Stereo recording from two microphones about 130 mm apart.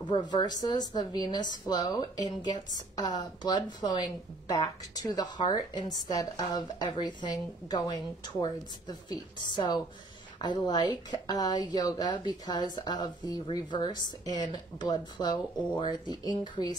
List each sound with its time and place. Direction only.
0.0 s speech: 35° left (ahead or behind)